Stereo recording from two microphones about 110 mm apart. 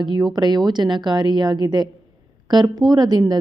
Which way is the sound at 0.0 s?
40° right (ahead or behind).